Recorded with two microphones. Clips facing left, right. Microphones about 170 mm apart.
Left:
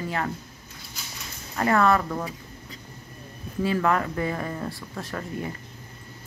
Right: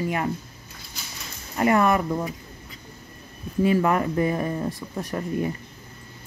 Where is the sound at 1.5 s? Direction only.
15° right (ahead or behind).